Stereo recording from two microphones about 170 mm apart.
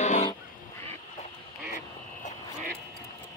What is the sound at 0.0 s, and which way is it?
Goose, 40° left (ahead or behind).